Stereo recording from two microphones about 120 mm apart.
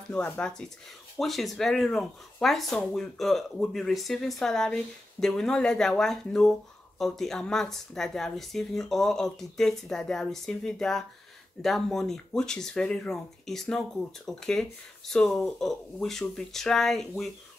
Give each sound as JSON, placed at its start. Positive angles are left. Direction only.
{"t": 0.1, "sound": "speech", "side_deg": 10}